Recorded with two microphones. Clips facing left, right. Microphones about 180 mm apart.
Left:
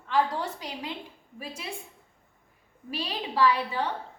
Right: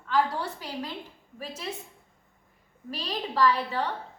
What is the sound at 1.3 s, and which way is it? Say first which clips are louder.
Speech: right 2 dB; 10° left (ahead or behind).